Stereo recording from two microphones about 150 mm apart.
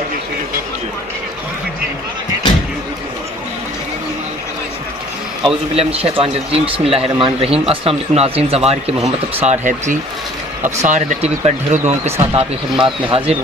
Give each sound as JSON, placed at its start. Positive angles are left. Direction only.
{"t": 5.4, "sound": "speech", "side_deg": -40}
{"t": 12.7, "sound": "speech", "side_deg": -35}